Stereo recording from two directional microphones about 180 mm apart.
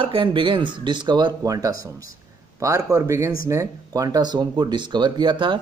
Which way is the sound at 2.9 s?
20° right (ahead or behind).